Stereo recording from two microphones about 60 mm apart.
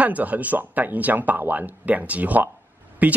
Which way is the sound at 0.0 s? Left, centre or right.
Right.